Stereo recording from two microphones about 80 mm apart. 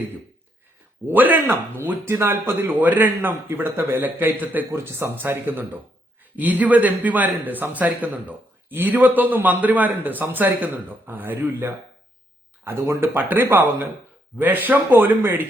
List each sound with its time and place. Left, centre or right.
1.0 s a man's voice: right
12.6 s speech: right
13.2 s a man's voice: right